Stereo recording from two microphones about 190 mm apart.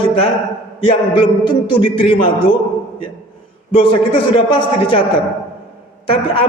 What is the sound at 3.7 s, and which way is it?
A man's voice, 30° left (ahead or behind).